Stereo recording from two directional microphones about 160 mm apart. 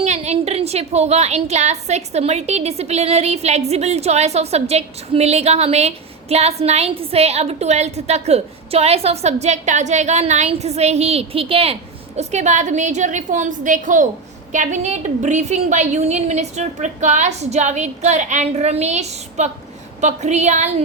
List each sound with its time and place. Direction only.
0.0 s a woman's voice: 45° right (ahead or behind)